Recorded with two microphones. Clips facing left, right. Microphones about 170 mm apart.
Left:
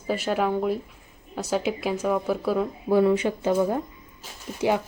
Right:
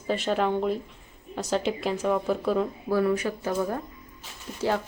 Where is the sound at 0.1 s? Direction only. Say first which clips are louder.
Left 1 dB; 5° left (ahead or behind).